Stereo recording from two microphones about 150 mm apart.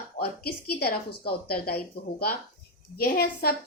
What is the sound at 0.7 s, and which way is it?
A woman's voice, 90° left.